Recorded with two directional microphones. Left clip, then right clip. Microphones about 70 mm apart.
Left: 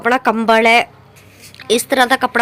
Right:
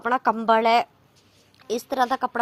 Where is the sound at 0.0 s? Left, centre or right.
Right.